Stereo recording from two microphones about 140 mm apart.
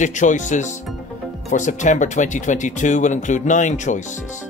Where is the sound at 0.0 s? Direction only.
60° left (ahead or behind).